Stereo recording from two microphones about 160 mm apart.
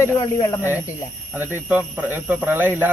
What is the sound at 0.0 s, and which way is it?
Speech, 20° left (ahead or behind).